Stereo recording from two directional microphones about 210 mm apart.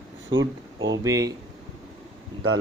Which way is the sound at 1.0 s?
15° right (ahead or behind).